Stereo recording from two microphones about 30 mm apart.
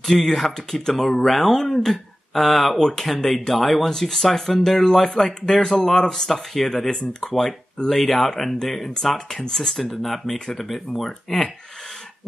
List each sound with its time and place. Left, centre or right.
0.0 s speech: centre
5.6 s speech: left; by 6.9 s centre
7.9 s speech: centre